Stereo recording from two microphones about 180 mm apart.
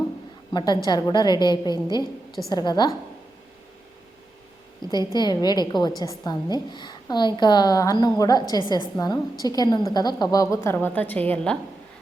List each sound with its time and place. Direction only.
0.5 s a woman's voice: 25° left (ahead or behind)
4.9 s a woman's voice: 25° left (ahead or behind)